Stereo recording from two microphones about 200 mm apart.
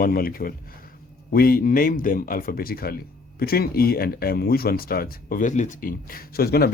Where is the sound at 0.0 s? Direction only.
45° left (ahead or behind).